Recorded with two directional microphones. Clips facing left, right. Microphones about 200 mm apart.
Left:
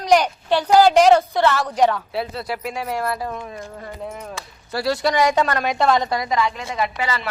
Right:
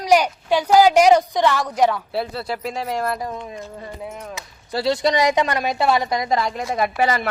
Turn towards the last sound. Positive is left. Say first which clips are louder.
# right 4 dB
turn(degrees=-45)  # may be behind; listen again after turning